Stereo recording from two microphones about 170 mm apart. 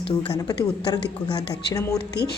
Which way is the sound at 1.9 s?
75° left (ahead or behind).